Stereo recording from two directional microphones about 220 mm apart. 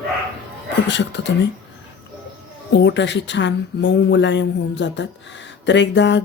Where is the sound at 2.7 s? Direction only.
55° left (ahead or behind).